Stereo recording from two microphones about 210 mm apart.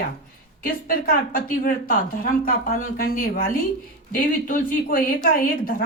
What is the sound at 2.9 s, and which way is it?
A woman's voice, 45° left (ahead or behind).